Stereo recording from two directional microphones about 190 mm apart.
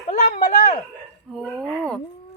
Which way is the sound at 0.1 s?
40° left (ahead or behind).